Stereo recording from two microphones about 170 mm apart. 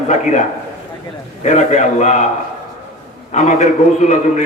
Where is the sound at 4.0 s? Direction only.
45° left (ahead or behind).